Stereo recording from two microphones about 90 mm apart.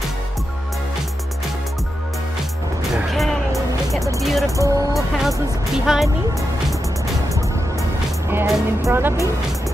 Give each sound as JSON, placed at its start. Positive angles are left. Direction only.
{"t": 2.9, "sound": "music", "side_deg": 0}
{"t": 4.2, "sound": "speech", "side_deg": 0}
{"t": 4.6, "sound": "speech", "side_deg": -40}
{"t": 4.9, "sound": "speech", "side_deg": -5}
{"t": 8.3, "sound": "speech", "side_deg": -25}